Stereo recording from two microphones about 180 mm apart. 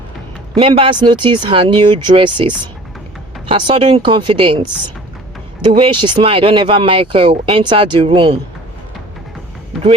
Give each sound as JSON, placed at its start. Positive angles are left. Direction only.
{"t": 0.5, "sound": "speech", "side_deg": -25}
{"t": 3.5, "sound": "speech", "side_deg": -30}
{"t": 5.6, "sound": "speech", "side_deg": -30}